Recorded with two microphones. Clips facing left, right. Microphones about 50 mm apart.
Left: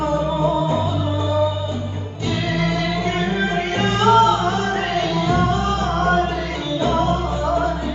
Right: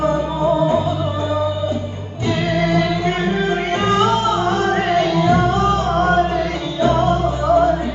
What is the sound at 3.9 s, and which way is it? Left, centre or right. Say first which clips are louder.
Music: left 4 dB; centre.